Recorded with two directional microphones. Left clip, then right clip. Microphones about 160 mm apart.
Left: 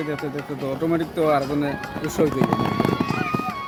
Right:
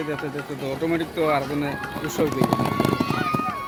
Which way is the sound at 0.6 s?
75° left (ahead or behind).